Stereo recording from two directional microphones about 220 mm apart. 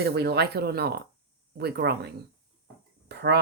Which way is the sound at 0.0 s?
50° right (ahead or behind).